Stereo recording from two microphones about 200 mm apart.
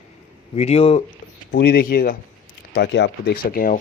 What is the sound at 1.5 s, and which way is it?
Speech, 50° left (ahead or behind).